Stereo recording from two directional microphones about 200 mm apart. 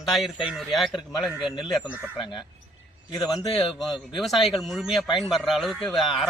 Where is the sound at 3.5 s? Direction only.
Centre (ahead or behind).